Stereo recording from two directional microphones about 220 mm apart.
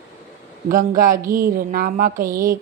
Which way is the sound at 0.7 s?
40° right (ahead or behind).